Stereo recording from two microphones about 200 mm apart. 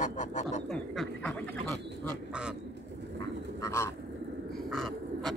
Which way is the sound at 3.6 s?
15° left (ahead or behind).